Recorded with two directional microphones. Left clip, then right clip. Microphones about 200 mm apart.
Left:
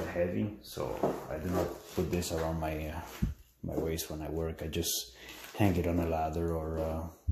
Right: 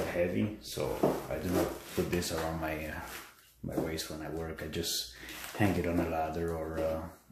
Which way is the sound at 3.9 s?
30° left (ahead or behind).